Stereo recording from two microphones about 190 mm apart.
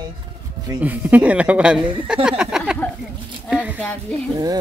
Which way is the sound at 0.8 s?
10° right (ahead or behind).